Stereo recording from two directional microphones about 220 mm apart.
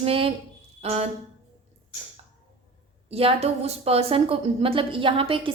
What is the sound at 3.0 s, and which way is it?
A woman's voice, 25° right (ahead or behind).